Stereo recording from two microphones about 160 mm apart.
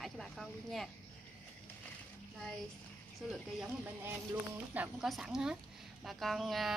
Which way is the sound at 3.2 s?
Centre (ahead or behind).